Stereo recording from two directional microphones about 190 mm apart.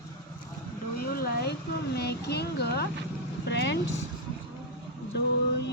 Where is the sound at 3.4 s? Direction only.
65° left (ahead or behind).